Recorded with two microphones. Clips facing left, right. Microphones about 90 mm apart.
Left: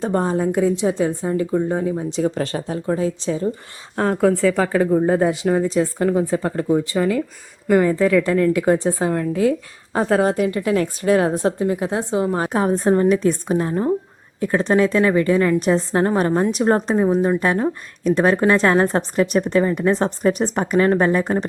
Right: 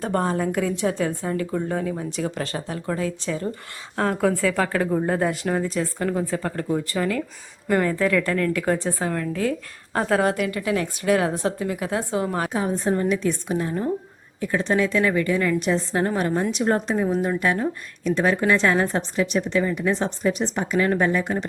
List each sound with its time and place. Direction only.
0.0 s a woman's voice: 25° left (ahead or behind)
3.9 s a woman's voice: 5° left (ahead or behind)
5.7 s a woman's voice: 25° left (ahead or behind); by 8.3 s 5° left (ahead or behind)
8.3 s a woman's voice: 20° left (ahead or behind)
10.2 s a woman's voice: 30° left (ahead or behind)
12.5 s a woman's voice: 45° left (ahead or behind)